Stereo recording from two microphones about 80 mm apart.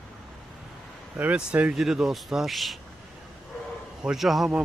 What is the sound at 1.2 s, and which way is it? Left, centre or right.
Speech, centre.